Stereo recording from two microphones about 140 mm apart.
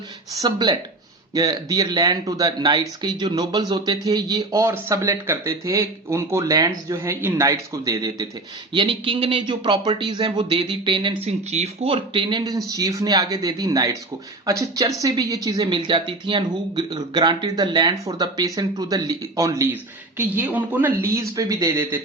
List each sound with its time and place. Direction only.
0.4 s speech: 30° right (ahead or behind)
8.7 s speech: 35° right (ahead or behind)
11.3 s speech: 50° right (ahead or behind); by 22.0 s 20° right (ahead or behind)